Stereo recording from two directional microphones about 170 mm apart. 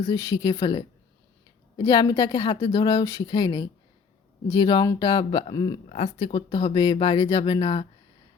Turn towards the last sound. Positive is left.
turn(degrees=30)  # may be behind; listen again after turning